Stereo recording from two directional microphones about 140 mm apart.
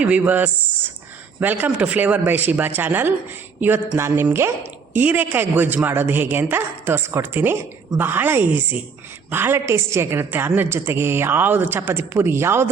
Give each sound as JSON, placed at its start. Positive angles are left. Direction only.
{"t": 0.0, "sound": "a woman's voice", "side_deg": -10}